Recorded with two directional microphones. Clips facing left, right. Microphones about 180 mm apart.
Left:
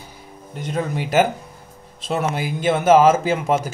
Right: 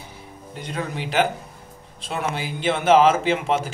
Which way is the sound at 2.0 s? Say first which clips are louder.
Left 4 dB; 45° left (ahead or behind).